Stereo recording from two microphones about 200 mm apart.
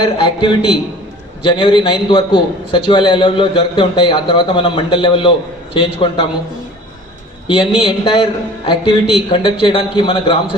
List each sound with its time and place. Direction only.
0.0 s a man's voice: 25° left (ahead or behind)
7.4 s a man's voice: 25° left (ahead or behind)